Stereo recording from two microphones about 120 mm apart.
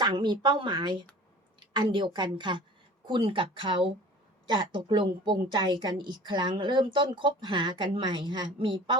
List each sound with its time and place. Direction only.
0.0 s a woman's voice: 35° right (ahead or behind)